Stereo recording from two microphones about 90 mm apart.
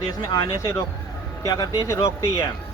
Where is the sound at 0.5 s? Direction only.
35° left (ahead or behind).